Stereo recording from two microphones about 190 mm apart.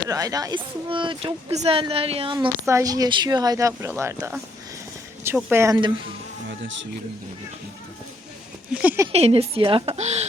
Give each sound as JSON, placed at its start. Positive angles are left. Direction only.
{"t": 0.1, "sound": "speech", "side_deg": -20}
{"t": 2.6, "sound": "speech", "side_deg": -15}
{"t": 6.5, "sound": "speech", "side_deg": -75}
{"t": 8.7, "sound": "speech", "side_deg": -10}
{"t": 9.1, "sound": "speech", "side_deg": -30}